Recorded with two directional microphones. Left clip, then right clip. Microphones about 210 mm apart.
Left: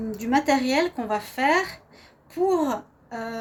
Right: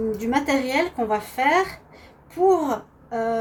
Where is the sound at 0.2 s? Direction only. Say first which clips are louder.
Left 4 dB; 55° left (ahead or behind).